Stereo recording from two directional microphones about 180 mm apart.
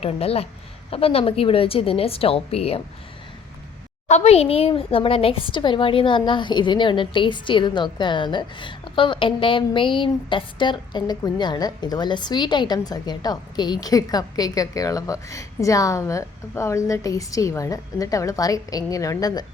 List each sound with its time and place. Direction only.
0.0 s a woman's voice: 35° left (ahead or behind)
4.1 s a woman's voice: 35° left (ahead or behind)